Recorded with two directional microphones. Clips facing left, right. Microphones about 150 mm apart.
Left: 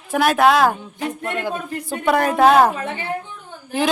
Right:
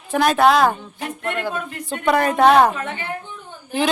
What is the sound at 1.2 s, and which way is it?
Speech, 15° left (ahead or behind).